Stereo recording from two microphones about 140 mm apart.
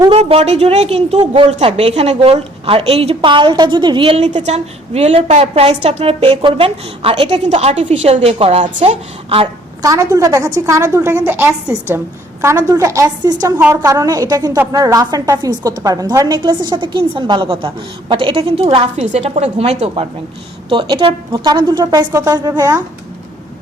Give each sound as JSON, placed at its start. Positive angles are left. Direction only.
{"t": 0.1, "sound": "a woman's voice", "side_deg": -45}
{"t": 4.2, "sound": "a woman's voice", "side_deg": -55}
{"t": 9.8, "sound": "a woman's voice", "side_deg": -20}
{"t": 20.7, "sound": "a woman's voice", "side_deg": -35}